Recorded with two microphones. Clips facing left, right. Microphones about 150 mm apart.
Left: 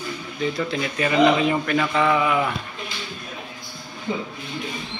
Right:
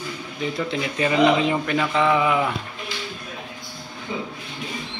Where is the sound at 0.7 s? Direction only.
20° right (ahead or behind).